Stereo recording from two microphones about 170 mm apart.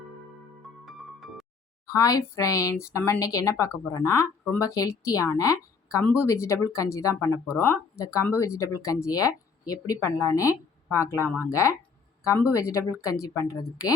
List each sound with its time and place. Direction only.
0.9 s music: centre (ahead or behind)
1.9 s speech: 20° left (ahead or behind)